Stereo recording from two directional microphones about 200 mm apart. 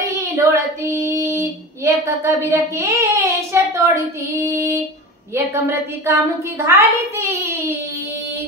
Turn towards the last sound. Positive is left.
turn(degrees=-15)  # may be behind; listen again after turning